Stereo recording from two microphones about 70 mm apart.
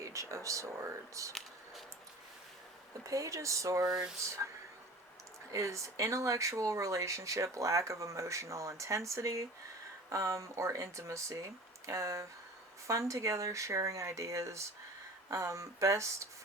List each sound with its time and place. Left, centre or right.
0.0 s speech: right
1.3 s a sound: centre
3.1 s speech: right
3.8 s speech: centre
5.5 s speech: right